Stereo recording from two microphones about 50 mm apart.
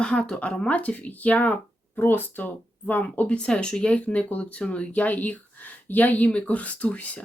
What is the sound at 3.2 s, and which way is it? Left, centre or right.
Speech, left.